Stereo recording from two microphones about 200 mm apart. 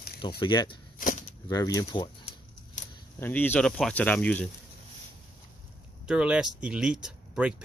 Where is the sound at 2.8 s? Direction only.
35° left (ahead or behind).